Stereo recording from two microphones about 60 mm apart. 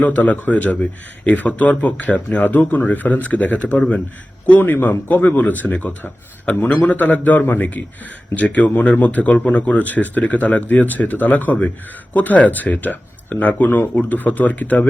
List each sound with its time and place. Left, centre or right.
0.0 s speech: left